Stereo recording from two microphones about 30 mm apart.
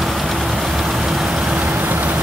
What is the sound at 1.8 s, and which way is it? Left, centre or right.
Vehicle, right.